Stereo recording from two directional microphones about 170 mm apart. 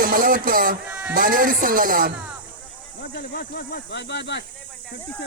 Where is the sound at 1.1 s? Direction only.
55° right (ahead or behind).